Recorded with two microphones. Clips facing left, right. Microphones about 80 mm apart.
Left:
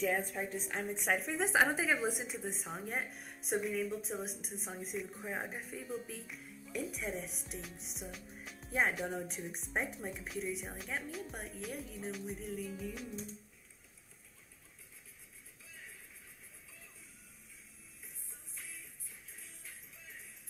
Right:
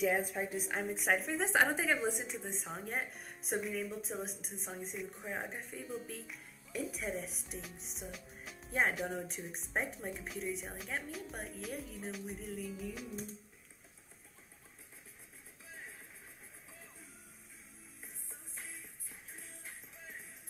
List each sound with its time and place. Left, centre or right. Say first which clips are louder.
0.0 s speech: right 2 dB; centre
18.5 s music: right 1 dB; right